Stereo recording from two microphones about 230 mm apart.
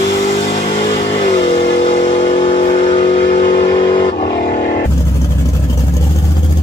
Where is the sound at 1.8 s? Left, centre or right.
Left.